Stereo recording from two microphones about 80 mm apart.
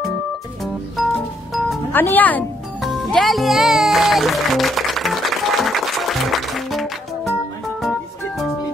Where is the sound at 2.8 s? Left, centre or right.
Centre.